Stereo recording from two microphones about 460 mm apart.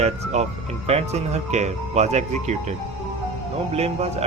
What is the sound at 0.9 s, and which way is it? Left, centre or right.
Speech, centre.